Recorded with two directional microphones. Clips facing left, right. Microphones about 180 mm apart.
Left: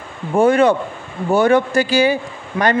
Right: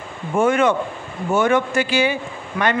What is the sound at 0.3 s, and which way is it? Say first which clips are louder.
A man's voice: left 4 dB; 35° left (ahead or behind).